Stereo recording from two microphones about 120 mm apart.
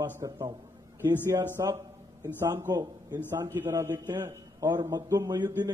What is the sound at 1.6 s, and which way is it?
A man's voice, 30° right (ahead or behind).